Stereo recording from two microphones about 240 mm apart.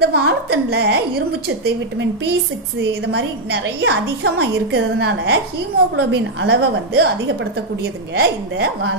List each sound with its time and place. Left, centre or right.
0.0 s a woman's voice: right
3.1 s a woman's voice: right